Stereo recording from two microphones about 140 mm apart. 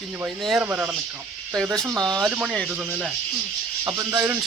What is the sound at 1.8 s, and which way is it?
Speech, 25° right (ahead or behind).